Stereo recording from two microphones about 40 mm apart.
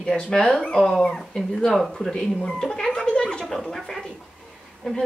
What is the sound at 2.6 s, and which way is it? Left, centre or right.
Speech, centre.